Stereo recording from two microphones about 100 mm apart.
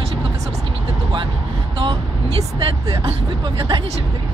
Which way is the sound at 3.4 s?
45° right (ahead or behind).